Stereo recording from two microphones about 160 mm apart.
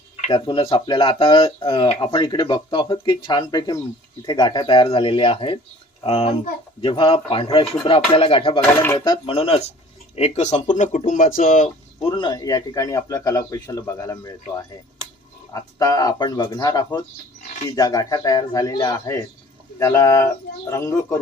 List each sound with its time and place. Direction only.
0.3 s a man's voice: 30° left (ahead or behind)
8.6 s speech: 15° left (ahead or behind)
9.0 s speech: 35° left (ahead or behind); by 11.7 s 55° left (ahead or behind)
12.0 s a man's voice: 30° left (ahead or behind)
15.8 s a man's voice: 25° left (ahead or behind)